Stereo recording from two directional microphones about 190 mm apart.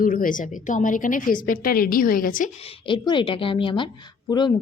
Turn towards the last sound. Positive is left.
turn(degrees=25)  # may be behind; listen again after turning